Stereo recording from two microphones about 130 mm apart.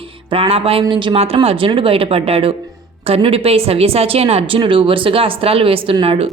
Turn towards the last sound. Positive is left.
turn(degrees=-45)  # may be behind; listen again after turning